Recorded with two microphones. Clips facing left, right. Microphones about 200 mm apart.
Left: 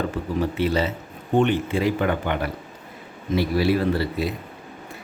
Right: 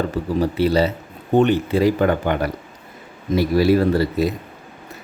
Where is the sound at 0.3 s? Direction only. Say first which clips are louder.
Right 5 dB; 35° right (ahead or behind).